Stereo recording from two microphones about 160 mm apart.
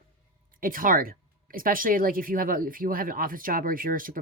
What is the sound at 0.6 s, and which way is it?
Speech, 60° right (ahead or behind).